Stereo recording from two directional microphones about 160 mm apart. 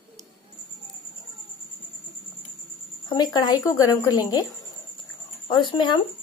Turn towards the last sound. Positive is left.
turn(degrees=30)  # may be behind; listen again after turning